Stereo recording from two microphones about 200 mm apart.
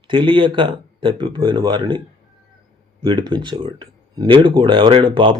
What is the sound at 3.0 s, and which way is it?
Speech, 25° right (ahead or behind).